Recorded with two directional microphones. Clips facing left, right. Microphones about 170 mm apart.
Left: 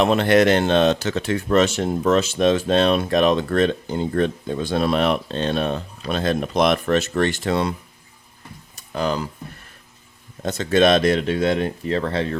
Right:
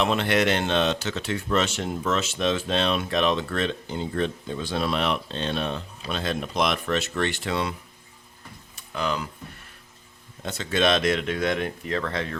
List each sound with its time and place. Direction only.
0.0 s speech: 45° left (ahead or behind)
8.7 s a sound: 40° left (ahead or behind)
10.4 s speech: 40° left (ahead or behind)